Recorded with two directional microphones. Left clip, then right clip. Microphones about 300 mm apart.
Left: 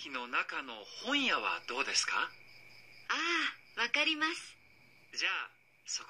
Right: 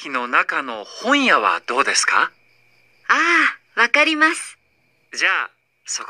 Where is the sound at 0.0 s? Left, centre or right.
Right.